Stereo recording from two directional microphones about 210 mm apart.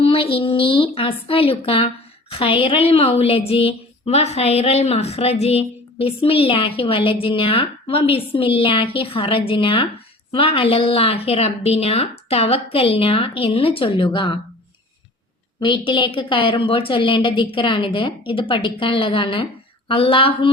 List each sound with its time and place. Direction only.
0.0 s a woman's voice: 25° left (ahead or behind)
15.6 s a woman's voice: 20° left (ahead or behind)